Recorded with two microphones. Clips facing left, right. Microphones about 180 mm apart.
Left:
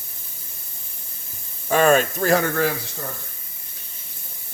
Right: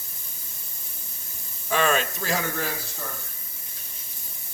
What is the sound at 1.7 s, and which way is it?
Speech, 45° left (ahead or behind).